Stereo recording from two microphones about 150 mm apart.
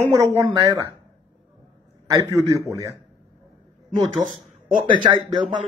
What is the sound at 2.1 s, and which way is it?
Speech, 20° right (ahead or behind).